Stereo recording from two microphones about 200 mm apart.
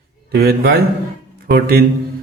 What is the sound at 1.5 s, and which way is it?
Speech, 50° right (ahead or behind).